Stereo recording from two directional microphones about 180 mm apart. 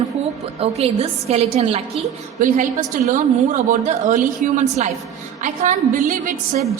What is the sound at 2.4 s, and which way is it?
A woman's voice, 45° right (ahead or behind).